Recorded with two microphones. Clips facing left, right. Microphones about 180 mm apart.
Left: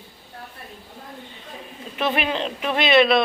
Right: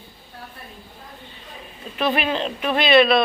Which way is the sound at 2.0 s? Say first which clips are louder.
Right 1 dB; 20° left (ahead or behind).